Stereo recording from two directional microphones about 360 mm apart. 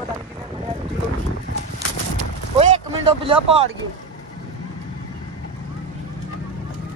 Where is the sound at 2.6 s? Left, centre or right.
Centre.